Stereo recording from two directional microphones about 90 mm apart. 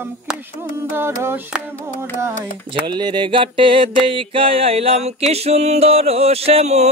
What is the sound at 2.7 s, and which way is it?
Music, 55° right (ahead or behind).